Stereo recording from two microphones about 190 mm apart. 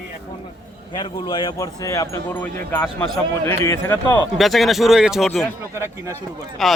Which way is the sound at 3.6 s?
15° left (ahead or behind).